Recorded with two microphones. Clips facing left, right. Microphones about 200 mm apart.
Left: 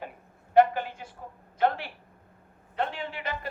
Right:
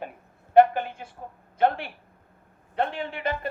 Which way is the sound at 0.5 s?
55° right (ahead or behind).